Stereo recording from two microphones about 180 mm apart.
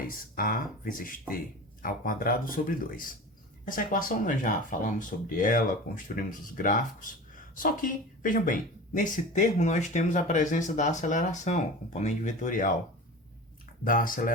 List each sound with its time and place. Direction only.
0.3 s speech: 50° left (ahead or behind)
13.8 s speech: 50° left (ahead or behind)